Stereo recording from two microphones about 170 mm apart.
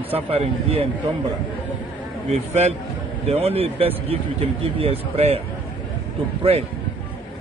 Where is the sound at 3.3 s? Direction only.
35° right (ahead or behind).